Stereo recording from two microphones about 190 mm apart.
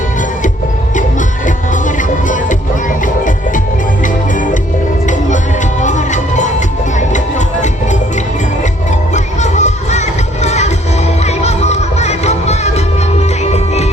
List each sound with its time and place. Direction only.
1.5 s music: 40° left (ahead or behind)
5.8 s music: 40° left (ahead or behind)
9.1 s music: 40° left (ahead or behind)